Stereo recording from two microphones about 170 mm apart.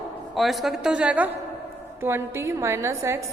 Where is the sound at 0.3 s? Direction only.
Centre (ahead or behind).